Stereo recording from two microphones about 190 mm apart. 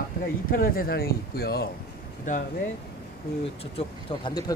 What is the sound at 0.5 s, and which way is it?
Speech, 50° left (ahead or behind).